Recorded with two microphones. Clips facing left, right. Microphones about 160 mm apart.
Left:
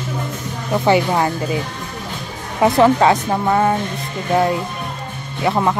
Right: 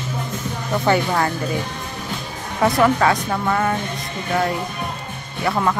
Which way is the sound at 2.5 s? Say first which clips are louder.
Left 4 dB; 25° left (ahead or behind).